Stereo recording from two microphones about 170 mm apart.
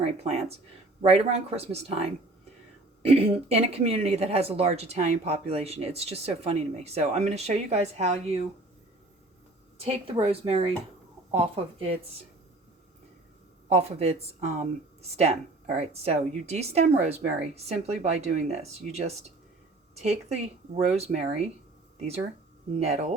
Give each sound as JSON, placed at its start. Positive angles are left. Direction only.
{"t": 0.0, "sound": "speech", "side_deg": -40}
{"t": 3.0, "sound": "speech", "side_deg": -35}
{"t": 9.7, "sound": "speech", "side_deg": -35}
{"t": 13.7, "sound": "speech", "side_deg": -40}
{"t": 22.8, "sound": "speech", "side_deg": -40}